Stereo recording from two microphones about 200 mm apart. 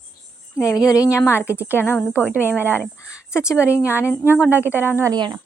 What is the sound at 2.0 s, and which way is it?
Speech, 5° right (ahead or behind).